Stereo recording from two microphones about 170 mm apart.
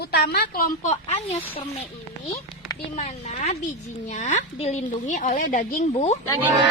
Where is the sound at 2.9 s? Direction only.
45° left (ahead or behind).